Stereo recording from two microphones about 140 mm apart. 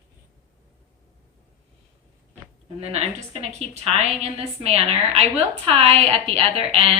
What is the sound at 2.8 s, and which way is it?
A woman's voice, 50° right (ahead or behind).